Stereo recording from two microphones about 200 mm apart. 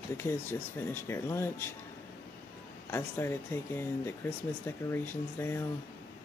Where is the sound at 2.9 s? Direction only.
10° left (ahead or behind).